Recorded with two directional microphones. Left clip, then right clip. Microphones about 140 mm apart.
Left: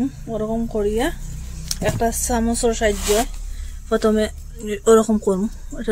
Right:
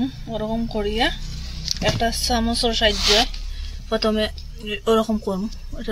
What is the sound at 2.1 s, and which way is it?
Speech, 55° left (ahead or behind).